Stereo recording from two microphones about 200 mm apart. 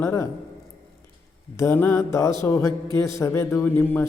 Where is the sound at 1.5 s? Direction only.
10° left (ahead or behind).